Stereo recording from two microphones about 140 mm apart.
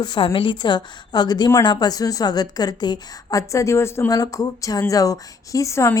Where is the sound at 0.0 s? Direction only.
30° left (ahead or behind).